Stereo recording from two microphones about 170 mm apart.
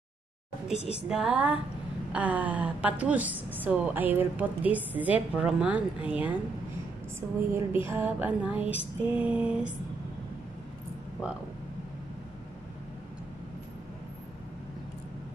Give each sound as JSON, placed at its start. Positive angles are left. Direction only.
{"t": 0.7, "sound": "a woman's voice", "side_deg": 35}
{"t": 1.0, "sound": "a woman's voice", "side_deg": -5}